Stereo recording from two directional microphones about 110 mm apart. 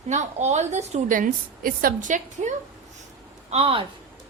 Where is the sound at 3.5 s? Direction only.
60° right (ahead or behind).